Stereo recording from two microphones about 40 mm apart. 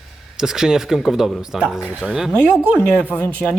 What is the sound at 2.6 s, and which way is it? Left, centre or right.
Speech, right.